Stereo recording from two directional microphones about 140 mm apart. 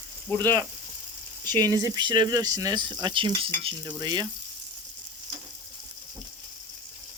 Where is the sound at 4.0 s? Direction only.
30° right (ahead or behind).